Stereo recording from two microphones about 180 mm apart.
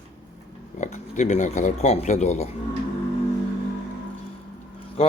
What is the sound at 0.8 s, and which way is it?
Speech, 40° left (ahead or behind).